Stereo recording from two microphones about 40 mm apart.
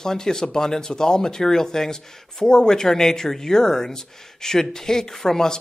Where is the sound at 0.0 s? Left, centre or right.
Centre.